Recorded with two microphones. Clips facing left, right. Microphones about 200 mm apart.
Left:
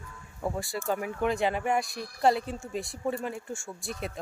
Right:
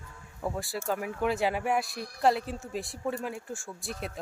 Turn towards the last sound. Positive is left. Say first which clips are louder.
# left 1 dB
turn(degrees=0)  # may be behind; listen again after turning